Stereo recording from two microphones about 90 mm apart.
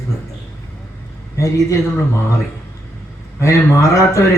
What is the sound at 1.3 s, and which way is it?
Speech, 35° left (ahead or behind).